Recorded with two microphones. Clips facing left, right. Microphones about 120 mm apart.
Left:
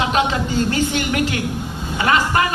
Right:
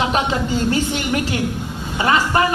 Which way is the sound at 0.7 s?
25° right (ahead or behind).